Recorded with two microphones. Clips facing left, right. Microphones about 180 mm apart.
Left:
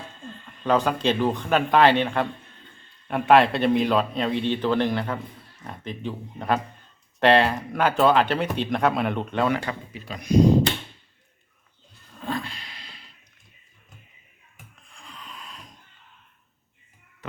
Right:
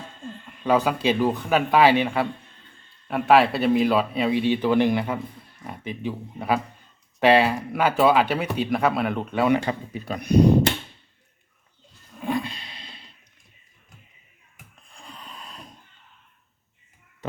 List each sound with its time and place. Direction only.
0.4 s speech: 10° right (ahead or behind)
9.9 s speech: 55° right (ahead or behind)
12.2 s a sound: 15° right (ahead or behind)
14.9 s snort: 35° right (ahead or behind)